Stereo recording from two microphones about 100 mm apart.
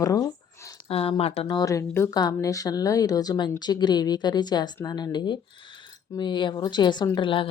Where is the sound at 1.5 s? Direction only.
40° left (ahead or behind).